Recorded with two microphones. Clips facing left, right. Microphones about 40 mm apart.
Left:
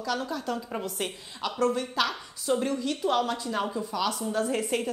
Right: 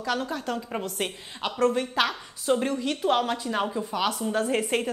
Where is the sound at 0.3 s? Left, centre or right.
Right.